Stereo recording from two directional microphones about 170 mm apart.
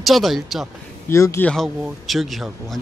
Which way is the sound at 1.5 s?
Centre (ahead or behind).